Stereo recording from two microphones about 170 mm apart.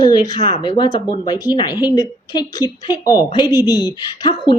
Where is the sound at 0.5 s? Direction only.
35° left (ahead or behind).